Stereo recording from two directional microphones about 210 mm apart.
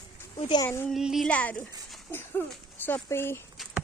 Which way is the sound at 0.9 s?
Centre (ahead or behind).